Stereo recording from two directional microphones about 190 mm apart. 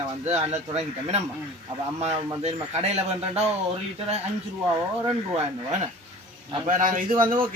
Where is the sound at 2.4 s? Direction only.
35° right (ahead or behind).